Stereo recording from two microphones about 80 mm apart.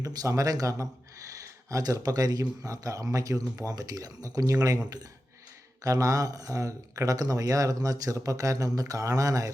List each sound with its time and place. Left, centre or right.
0.0 s speech: right
5.8 s speech: right